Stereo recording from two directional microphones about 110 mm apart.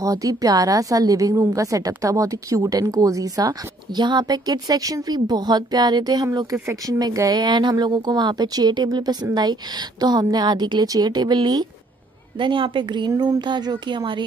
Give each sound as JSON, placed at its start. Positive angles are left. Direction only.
{"t": 0.0, "sound": "a woman's voice", "side_deg": -30}
{"t": 12.4, "sound": "speech", "side_deg": -50}
{"t": 13.1, "sound": "a woman's voice", "side_deg": -30}
{"t": 13.4, "sound": "speech", "side_deg": -40}